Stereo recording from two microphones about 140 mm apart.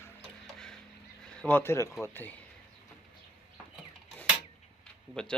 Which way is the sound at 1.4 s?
15° left (ahead or behind).